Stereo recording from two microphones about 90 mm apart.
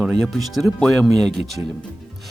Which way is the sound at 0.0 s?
Centre (ahead or behind).